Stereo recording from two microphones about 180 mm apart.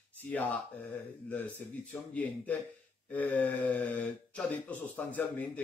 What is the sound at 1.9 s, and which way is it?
Speech, 10° left (ahead or behind).